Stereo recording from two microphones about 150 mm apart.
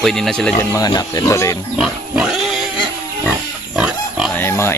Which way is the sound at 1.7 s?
5° right (ahead or behind).